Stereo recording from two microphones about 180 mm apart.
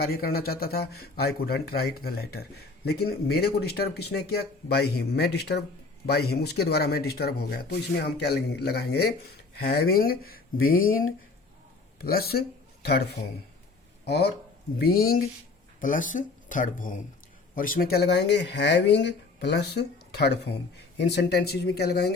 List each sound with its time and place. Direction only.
0.0 s speech: 60° left (ahead or behind)